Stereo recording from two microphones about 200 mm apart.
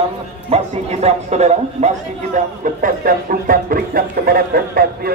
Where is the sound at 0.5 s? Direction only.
30° right (ahead or behind).